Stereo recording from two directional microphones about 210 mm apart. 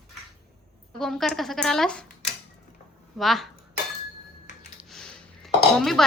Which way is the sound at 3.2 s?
Centre (ahead or behind).